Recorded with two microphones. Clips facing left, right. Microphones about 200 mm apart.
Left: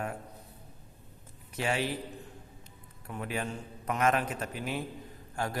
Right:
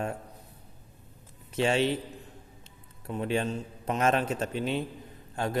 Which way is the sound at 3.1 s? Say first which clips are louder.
Right 6 dB; 25° right (ahead or behind).